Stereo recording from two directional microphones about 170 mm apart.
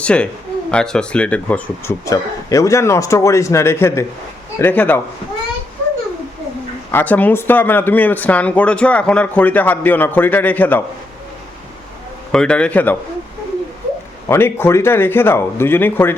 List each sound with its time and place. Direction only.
0.0 s speech: 5° left (ahead or behind)
2.0 s speech: 20° left (ahead or behind)
6.9 s speech: 10° left (ahead or behind)
12.3 s speech: 5° left (ahead or behind)
14.3 s speech: 15° left (ahead or behind)